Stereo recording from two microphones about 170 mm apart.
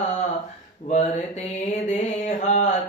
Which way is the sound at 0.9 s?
45° left (ahead or behind).